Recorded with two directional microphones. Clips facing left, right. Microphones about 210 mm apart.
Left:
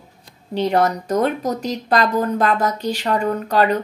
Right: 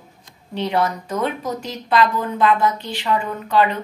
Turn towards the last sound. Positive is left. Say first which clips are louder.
# left 2 dB
turn(degrees=40)  # may be behind; listen again after turning